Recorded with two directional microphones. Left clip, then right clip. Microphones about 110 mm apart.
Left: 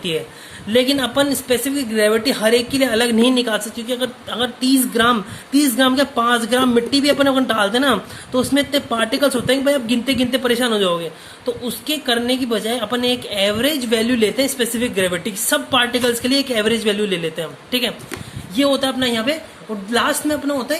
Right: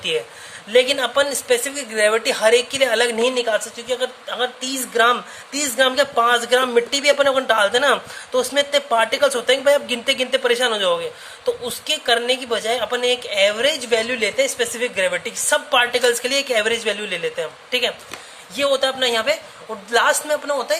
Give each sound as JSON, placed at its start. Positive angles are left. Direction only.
{"t": 0.7, "sound": "speech", "side_deg": -25}
{"t": 3.8, "sound": "a woman's voice", "side_deg": -20}
{"t": 15.7, "sound": "speech", "side_deg": -25}
{"t": 18.5, "sound": "speech", "side_deg": -35}